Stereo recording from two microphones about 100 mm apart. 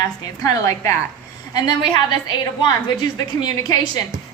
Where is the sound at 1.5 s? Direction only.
45° left (ahead or behind).